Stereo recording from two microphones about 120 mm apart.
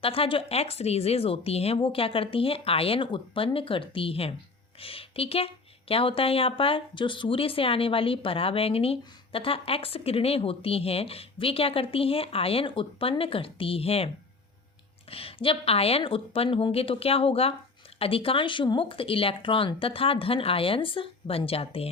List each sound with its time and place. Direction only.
0.0 s a woman's voice: 50° left (ahead or behind)
15.1 s speech: 50° left (ahead or behind)